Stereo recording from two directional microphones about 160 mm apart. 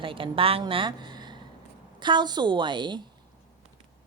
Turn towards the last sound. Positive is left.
turn(degrees=-30)  # may be behind; listen again after turning